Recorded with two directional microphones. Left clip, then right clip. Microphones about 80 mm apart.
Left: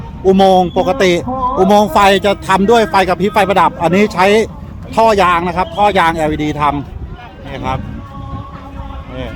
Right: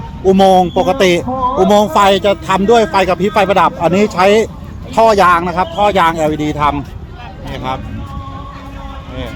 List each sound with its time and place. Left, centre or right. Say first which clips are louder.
0.3 s speech: even; centre
1.2 s a sound: right 1 dB; right
1.6 s a man's voice: left 1 dB; left
1.9 s a man's voice: even; left
4.9 s a man's voice: right 1 dB; centre